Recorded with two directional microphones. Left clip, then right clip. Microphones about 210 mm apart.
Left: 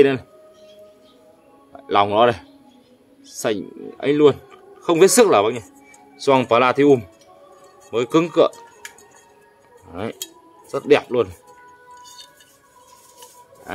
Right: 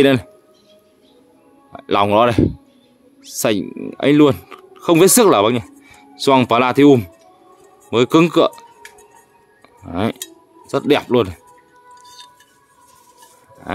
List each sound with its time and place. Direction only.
0.0 s speech: 45° right (ahead or behind)
1.7 s speech: 40° right (ahead or behind)
9.8 s speech: 50° right (ahead or behind)